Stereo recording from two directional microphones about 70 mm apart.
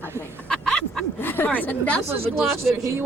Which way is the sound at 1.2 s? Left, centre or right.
Left.